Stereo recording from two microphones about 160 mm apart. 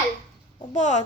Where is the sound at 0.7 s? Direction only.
45° left (ahead or behind).